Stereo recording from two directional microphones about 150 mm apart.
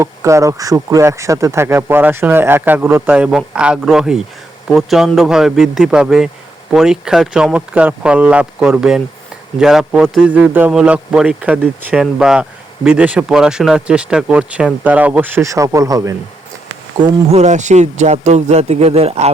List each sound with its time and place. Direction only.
0.0 s a man's voice: 20° right (ahead or behind)
17.0 s speech: 45° right (ahead or behind)